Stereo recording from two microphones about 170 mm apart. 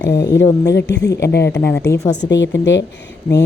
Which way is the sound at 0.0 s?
80° left.